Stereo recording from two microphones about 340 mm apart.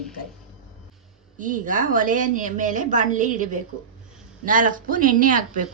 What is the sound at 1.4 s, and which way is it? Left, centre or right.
A woman's voice, right.